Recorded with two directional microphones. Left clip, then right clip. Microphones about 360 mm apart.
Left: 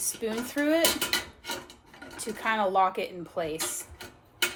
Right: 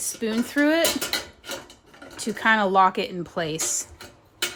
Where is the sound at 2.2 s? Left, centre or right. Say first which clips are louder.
Right 7 dB; right.